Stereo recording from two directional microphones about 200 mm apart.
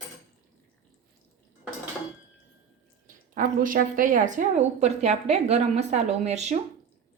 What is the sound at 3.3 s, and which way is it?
A woman's voice, 45° right (ahead or behind).